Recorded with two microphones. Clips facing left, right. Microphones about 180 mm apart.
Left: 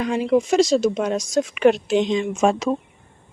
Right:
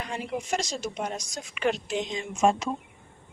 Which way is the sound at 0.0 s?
90° left.